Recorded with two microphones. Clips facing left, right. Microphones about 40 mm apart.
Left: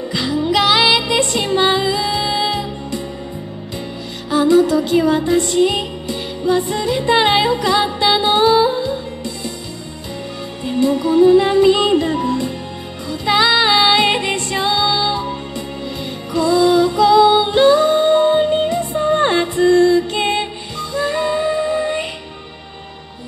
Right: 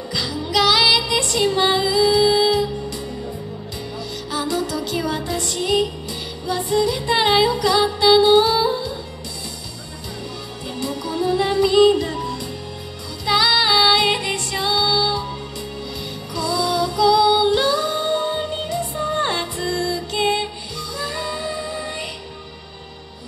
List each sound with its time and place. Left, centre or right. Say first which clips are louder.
0.1 s music: left 5 dB; left
4.3 s music: left 11 dB; left
10.6 s music: left 11 dB; left
16.3 s music: left 8 dB; left